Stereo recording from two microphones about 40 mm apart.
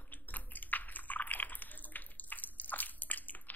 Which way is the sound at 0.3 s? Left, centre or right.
Left.